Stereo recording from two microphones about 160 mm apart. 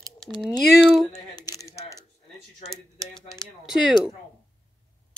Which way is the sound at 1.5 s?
15° right (ahead or behind).